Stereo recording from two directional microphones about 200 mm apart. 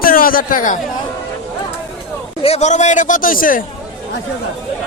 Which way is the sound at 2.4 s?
35° left (ahead or behind).